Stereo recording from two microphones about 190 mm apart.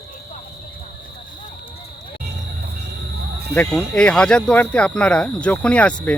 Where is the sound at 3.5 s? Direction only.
10° left (ahead or behind).